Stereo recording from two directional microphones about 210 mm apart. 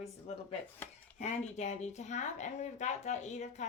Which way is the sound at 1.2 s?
35° left (ahead or behind).